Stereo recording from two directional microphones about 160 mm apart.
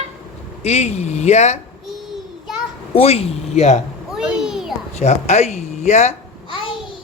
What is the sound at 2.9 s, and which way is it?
Speech, 40° left (ahead or behind).